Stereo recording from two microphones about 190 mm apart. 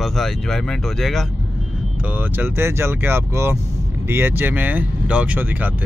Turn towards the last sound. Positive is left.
turn(degrees=-10)  # may be behind; listen again after turning